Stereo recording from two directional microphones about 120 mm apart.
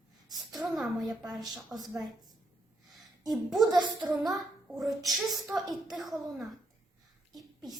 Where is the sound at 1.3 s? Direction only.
Centre (ahead or behind).